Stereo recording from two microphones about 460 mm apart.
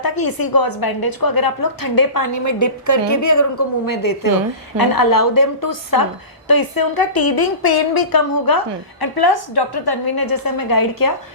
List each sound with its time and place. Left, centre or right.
0.0 s a woman's voice: left